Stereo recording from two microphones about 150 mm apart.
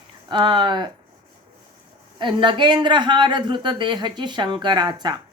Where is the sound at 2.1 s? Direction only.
30° right (ahead or behind).